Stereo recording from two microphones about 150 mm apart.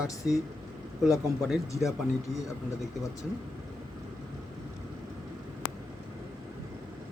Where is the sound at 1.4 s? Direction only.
Centre (ahead or behind).